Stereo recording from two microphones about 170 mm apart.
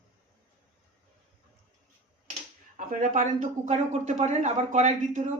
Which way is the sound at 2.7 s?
50° right (ahead or behind).